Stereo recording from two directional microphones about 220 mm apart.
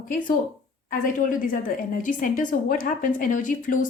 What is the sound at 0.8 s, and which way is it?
A woman's voice, 40° left (ahead or behind).